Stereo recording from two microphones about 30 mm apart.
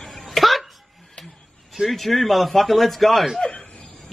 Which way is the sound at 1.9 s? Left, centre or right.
Centre.